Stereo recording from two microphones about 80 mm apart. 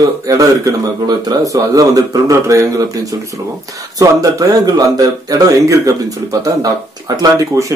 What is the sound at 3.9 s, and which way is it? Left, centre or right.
Speech, right.